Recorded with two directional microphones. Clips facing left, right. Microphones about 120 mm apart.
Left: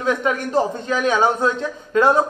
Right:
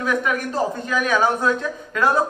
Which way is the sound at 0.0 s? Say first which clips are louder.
Left 2 dB; 25° left (ahead or behind).